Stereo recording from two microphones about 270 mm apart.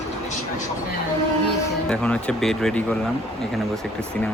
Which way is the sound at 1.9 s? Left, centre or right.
Centre.